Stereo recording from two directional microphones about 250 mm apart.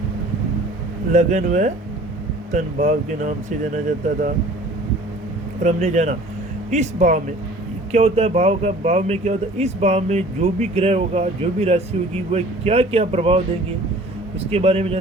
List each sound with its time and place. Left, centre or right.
1.1 s speech: right
5.6 s speech: right
14.5 s speech: right